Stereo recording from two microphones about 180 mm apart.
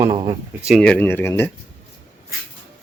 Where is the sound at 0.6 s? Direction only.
Centre (ahead or behind).